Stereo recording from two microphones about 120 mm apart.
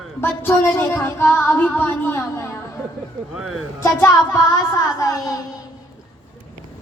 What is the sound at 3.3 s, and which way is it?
Speech, centre (ahead or behind).